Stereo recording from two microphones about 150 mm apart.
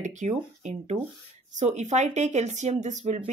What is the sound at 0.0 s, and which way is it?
Speech, 55° right (ahead or behind).